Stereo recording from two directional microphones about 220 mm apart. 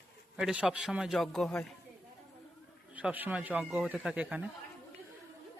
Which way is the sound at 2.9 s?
5° right (ahead or behind).